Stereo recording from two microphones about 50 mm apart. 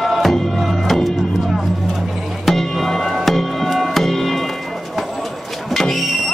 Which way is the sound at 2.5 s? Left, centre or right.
Centre.